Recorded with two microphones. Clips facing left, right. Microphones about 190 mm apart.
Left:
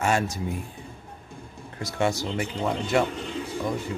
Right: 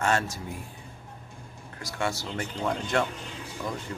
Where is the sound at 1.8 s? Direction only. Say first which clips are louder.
Left 6 dB; 20° left (ahead or behind).